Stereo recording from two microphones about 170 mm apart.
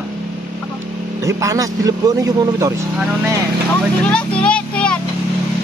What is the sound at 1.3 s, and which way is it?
A man's voice, 20° right (ahead or behind).